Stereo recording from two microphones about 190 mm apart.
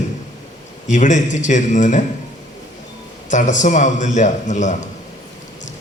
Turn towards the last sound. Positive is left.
turn(degrees=40)  # may be behind; listen again after turning